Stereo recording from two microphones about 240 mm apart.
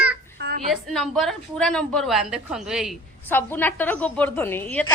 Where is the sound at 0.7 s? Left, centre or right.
Centre.